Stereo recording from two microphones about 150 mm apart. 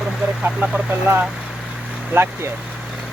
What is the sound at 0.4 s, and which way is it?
Speech, 10° right (ahead or behind).